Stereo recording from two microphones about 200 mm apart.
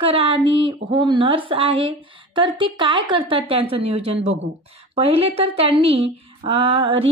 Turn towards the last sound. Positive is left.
turn(degrees=-30)  # may be behind; listen again after turning